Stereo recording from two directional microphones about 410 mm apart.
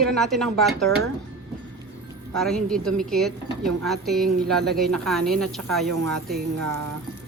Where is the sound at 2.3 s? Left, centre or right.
Centre.